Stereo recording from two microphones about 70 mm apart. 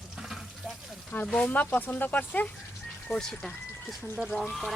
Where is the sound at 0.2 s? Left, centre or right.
Centre.